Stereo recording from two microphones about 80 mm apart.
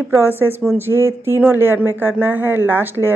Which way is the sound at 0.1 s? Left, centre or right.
Right.